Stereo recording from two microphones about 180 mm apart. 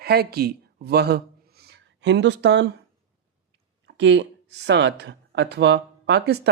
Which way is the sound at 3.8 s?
80° right.